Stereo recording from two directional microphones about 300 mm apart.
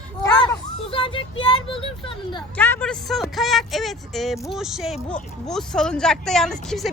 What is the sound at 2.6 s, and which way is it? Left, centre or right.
Speech, centre.